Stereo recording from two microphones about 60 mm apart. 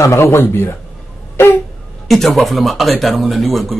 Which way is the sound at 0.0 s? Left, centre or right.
Left.